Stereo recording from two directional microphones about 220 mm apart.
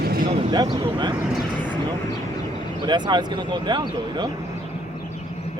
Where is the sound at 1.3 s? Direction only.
Centre (ahead or behind).